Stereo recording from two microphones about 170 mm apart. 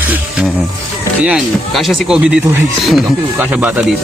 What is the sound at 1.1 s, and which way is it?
Speech, 5° right (ahead or behind).